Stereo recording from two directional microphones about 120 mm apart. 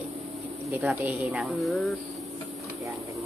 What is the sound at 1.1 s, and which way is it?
Speech, 5° right (ahead or behind).